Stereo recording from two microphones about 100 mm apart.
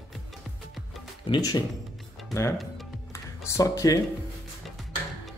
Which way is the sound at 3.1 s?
30° left (ahead or behind).